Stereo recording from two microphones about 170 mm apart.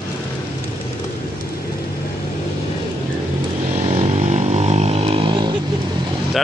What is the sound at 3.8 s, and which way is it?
Vehicle, 35° right (ahead or behind).